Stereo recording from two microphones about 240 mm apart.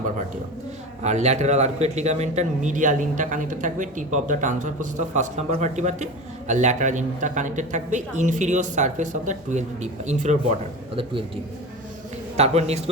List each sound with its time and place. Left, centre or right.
1.0 s a man's voice: right
12.4 s a man's voice: right